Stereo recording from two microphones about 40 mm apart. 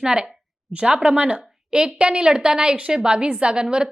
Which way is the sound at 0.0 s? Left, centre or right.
Centre.